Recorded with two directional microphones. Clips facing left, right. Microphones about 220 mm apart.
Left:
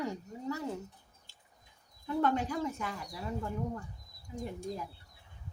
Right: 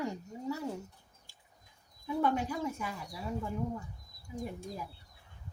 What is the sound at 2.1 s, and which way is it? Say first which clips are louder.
Speech: left 1 dB; 10° right (ahead or behind).